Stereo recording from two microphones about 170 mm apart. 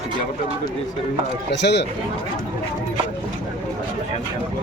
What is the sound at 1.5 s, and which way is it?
Speech, 85° left.